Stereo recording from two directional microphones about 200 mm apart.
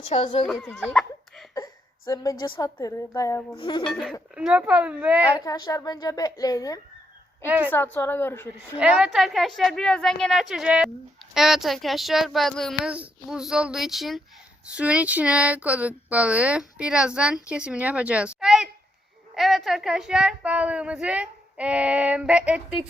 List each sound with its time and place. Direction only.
0.0 s speech: 35° left (ahead or behind)
0.4 s speech: 5° left (ahead or behind)
2.0 s a woman's voice: 15° left (ahead or behind)
3.6 s speech: 25° left (ahead or behind)
3.8 s speech: centre (ahead or behind)
5.5 s a woman's voice: 15° left (ahead or behind)
7.4 s a woman's voice: 10° right (ahead or behind)
7.9 s a woman's voice: 10° left (ahead or behind)
8.8 s speech: 5° right (ahead or behind)